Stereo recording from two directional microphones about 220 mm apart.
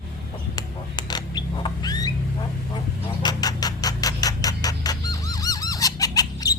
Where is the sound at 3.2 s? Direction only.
20° left (ahead or behind).